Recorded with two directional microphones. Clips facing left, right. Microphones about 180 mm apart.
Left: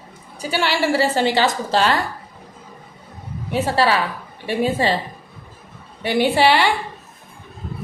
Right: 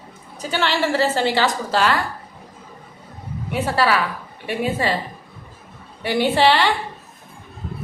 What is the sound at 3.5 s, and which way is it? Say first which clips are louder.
A woman's voice: left 1 dB; 30° left (ahead or behind).